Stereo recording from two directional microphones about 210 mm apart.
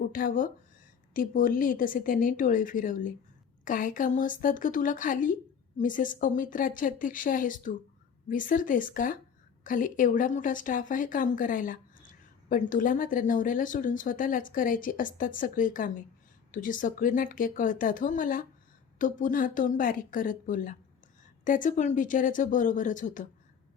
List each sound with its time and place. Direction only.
0.1 s speech: 40° left (ahead or behind)